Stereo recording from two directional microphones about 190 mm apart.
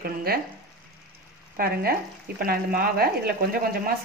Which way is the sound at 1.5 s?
55° right (ahead or behind).